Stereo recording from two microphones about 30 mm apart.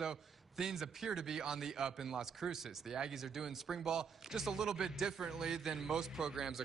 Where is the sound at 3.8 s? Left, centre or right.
Right.